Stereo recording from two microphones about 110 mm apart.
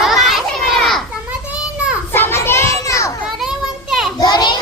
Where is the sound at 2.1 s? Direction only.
20° left (ahead or behind).